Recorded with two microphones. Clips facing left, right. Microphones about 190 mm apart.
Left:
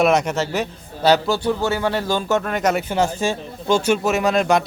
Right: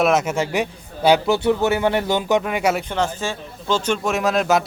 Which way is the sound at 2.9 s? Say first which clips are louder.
Left 3 dB; 10° left (ahead or behind).